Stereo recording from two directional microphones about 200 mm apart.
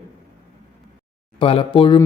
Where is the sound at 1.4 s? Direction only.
25° left (ahead or behind).